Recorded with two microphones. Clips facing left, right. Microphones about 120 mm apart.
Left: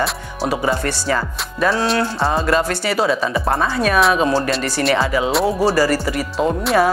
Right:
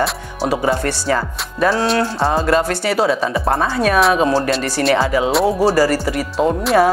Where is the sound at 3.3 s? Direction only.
30° right (ahead or behind).